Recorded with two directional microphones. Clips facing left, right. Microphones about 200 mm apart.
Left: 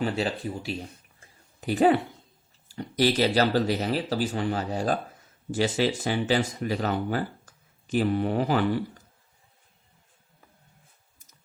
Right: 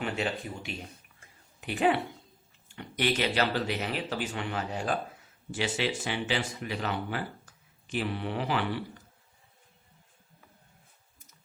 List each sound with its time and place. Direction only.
0.0 s speech: 35° left (ahead or behind)